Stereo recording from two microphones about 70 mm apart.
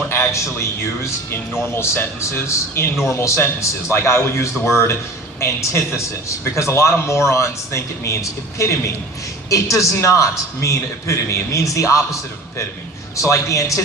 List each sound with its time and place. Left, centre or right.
0.1 s a sound: left
1.6 s a man's voice: left
13.2 s a man's voice: left